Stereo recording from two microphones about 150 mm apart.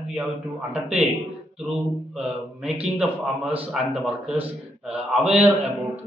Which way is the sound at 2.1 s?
5° right (ahead or behind).